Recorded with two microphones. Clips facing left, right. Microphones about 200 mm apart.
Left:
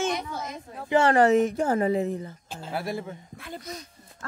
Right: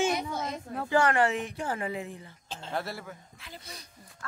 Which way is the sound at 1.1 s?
40° left (ahead or behind).